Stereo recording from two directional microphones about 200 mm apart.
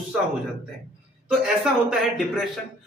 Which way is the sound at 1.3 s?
5° right (ahead or behind).